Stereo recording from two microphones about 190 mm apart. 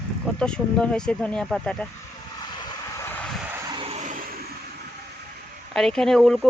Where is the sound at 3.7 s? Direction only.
30° right (ahead or behind).